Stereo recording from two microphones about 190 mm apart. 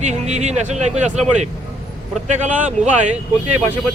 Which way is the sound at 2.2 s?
40° right (ahead or behind).